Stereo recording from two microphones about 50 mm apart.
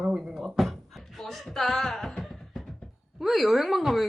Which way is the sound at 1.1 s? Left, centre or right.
Centre.